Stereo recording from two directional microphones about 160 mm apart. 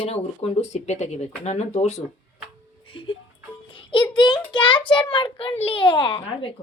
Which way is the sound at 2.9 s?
30° left (ahead or behind).